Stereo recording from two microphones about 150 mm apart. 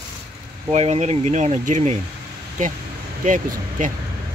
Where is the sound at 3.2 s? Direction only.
60° right (ahead or behind).